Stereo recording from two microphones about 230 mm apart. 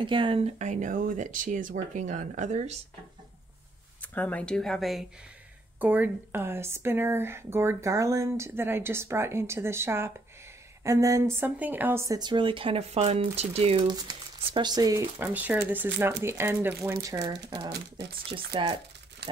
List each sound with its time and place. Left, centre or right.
0.0 s speech: right
4.0 s speech: centre; by 18.8 s right